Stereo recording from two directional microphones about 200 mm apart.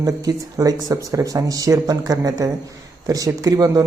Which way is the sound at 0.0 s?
20° right (ahead or behind).